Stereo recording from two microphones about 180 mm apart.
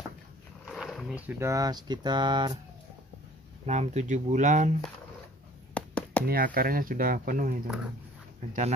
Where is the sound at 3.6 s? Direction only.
40° right (ahead or behind).